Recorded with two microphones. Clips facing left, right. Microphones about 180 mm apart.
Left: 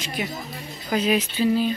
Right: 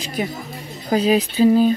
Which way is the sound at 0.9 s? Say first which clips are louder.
Right 5 dB; 35° right (ahead or behind).